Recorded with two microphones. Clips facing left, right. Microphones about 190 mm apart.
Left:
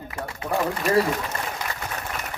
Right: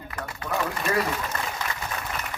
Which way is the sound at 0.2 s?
30° left (ahead or behind).